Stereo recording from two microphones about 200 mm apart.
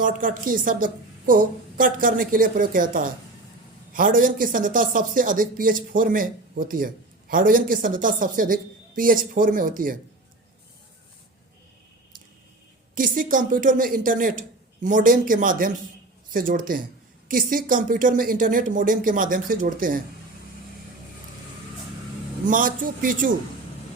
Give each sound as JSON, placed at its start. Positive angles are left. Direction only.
{"t": 0.0, "sound": "speech", "side_deg": -45}
{"t": 12.9, "sound": "speech", "side_deg": -45}
{"t": 22.4, "sound": "speech", "side_deg": -45}